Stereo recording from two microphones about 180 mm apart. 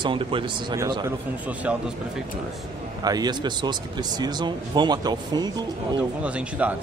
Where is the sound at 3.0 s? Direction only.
20° right (ahead or behind).